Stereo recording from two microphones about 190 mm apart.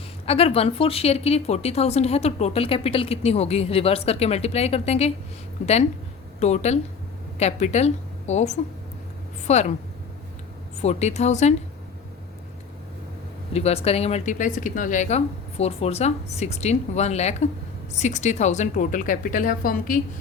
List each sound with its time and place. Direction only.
0.3 s speech: 30° left (ahead or behind)
6.4 s speech: 35° left (ahead or behind)
10.8 s speech: 35° left (ahead or behind)
13.5 s a woman's voice: 35° left (ahead or behind)